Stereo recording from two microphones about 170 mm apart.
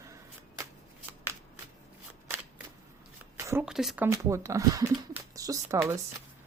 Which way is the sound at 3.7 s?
5° right (ahead or behind).